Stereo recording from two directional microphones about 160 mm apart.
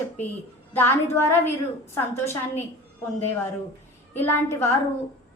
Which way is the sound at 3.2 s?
15° left (ahead or behind).